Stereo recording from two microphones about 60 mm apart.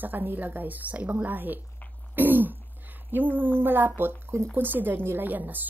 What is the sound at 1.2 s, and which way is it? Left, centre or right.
Speech, right.